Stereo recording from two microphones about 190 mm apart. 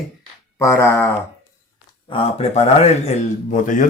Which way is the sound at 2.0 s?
30° left (ahead or behind).